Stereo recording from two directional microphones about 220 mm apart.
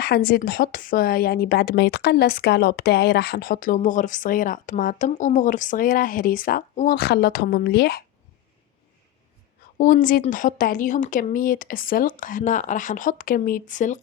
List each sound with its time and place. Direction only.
0.0 s speech: 45° left (ahead or behind)
9.7 s speech: 35° left (ahead or behind)